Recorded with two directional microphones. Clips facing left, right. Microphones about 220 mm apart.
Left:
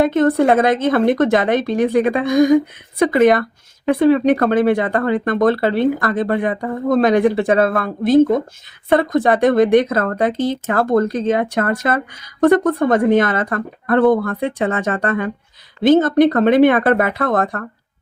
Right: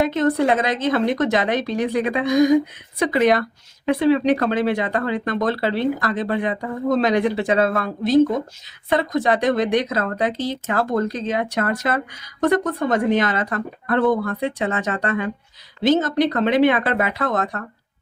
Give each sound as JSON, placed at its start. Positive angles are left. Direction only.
{"t": 0.0, "sound": "speech", "side_deg": 55}